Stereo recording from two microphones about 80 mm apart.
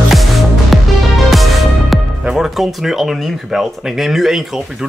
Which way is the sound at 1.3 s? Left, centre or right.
Centre.